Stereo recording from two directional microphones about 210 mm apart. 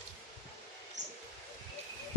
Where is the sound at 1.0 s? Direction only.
35° right (ahead or behind).